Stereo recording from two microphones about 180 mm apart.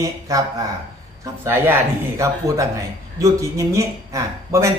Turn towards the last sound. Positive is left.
turn(degrees=-15)  # may be behind; listen again after turning